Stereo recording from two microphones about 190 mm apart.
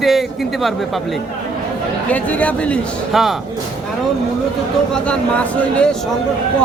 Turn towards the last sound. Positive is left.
turn(degrees=5)  # may be behind; listen again after turning